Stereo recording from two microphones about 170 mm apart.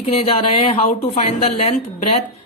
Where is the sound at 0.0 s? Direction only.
35° left (ahead or behind).